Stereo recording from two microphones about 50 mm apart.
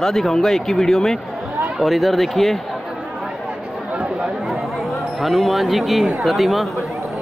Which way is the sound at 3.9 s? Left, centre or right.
Right.